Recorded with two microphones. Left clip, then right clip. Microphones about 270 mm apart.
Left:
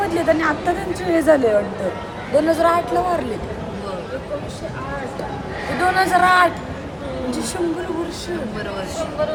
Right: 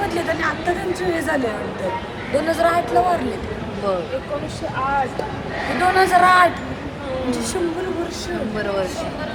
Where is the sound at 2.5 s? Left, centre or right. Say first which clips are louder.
Even; centre.